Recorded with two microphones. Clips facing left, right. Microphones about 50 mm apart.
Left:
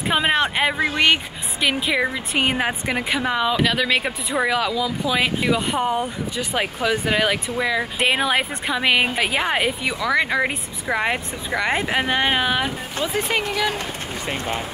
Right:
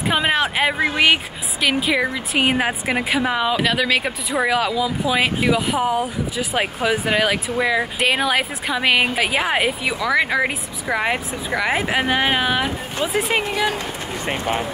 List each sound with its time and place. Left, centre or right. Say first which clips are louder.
0.1 s speech: even; centre
8.1 s speech: even; centre
13.4 s speech: right 2 dB; right